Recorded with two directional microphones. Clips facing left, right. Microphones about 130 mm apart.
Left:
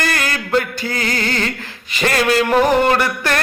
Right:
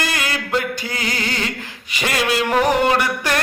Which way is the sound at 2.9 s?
15° right (ahead or behind).